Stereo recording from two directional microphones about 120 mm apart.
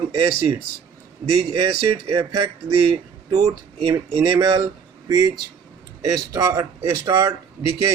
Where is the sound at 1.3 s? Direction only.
60° right (ahead or behind).